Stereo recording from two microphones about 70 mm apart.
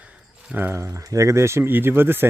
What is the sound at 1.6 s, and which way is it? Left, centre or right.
Speech, right.